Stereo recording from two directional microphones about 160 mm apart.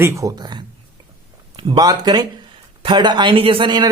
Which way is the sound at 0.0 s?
20° right (ahead or behind).